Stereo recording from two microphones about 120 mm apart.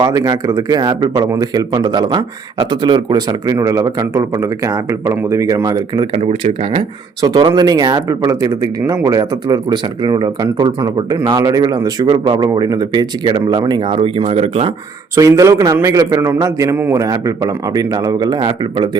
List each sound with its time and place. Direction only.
0.0 s speech: 30° right (ahead or behind)
6.2 s speech: 50° right (ahead or behind)
7.2 s speech: 30° right (ahead or behind); by 14.7 s 60° right (ahead or behind)
15.1 s a man's voice: 25° right (ahead or behind)